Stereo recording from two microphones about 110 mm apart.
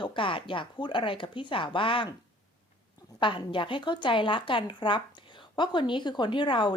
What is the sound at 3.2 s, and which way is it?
Speech, 50° left (ahead or behind).